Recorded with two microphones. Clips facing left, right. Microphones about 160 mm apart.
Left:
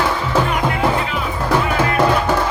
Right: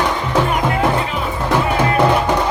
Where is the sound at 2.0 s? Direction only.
20° right (ahead or behind).